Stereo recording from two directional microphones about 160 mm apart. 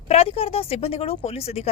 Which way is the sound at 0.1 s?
35° left (ahead or behind).